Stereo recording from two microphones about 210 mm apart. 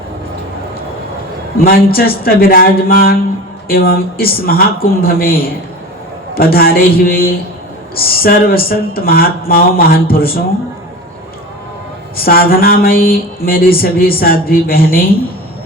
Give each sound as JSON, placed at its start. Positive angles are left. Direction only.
{"t": 1.5, "sound": "speech", "side_deg": 45}
{"t": 12.1, "sound": "speech", "side_deg": 45}